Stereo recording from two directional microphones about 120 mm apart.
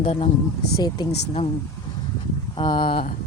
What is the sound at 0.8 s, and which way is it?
Speech, 35° left (ahead or behind).